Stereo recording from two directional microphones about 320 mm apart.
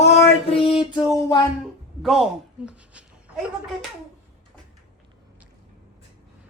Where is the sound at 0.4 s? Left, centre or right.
Centre.